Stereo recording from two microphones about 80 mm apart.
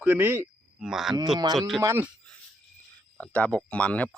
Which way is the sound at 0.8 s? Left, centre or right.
Centre.